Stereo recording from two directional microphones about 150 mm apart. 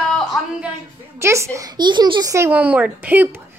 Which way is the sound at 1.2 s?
20° right (ahead or behind).